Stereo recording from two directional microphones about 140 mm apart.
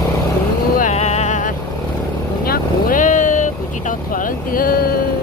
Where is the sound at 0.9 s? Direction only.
50° left (ahead or behind).